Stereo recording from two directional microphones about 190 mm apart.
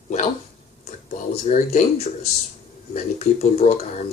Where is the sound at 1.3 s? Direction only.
35° left (ahead or behind).